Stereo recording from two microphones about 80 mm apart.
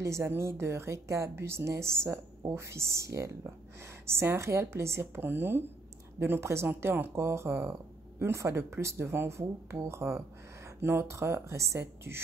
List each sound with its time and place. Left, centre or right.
0.0 s a woman's voice: right